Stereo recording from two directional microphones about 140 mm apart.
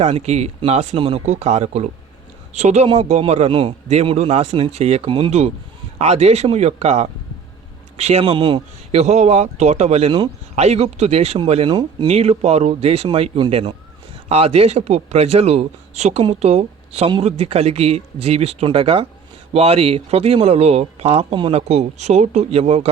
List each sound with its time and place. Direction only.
0.0 s speech: 50° right (ahead or behind)
8.9 s speech: 50° right (ahead or behind); by 12.0 s 35° right (ahead or behind)
12.0 s speech: 50° right (ahead or behind)